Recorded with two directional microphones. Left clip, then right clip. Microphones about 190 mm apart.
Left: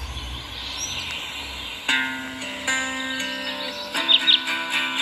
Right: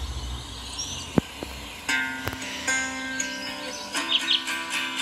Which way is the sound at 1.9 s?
35° left (ahead or behind).